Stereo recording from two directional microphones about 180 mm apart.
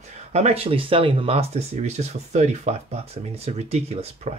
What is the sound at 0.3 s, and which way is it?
Speech, 35° right (ahead or behind).